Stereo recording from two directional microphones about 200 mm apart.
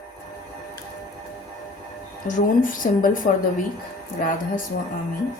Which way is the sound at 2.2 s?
40° left (ahead or behind).